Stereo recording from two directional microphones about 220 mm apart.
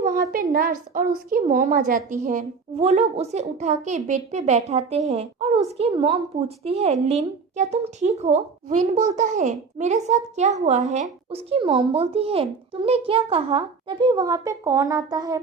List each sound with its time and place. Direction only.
0.1 s a woman's voice: 40° right (ahead or behind); by 15.4 s 15° right (ahead or behind)